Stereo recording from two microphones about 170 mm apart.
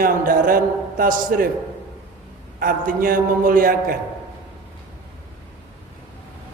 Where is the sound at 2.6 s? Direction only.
55° right (ahead or behind).